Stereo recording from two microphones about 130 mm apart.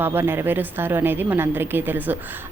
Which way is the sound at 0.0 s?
15° right (ahead or behind).